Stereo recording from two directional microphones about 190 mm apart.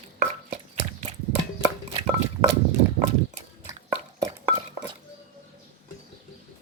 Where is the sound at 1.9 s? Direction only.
30° right (ahead or behind).